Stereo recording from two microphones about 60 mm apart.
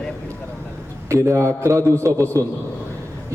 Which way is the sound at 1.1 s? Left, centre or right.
Right.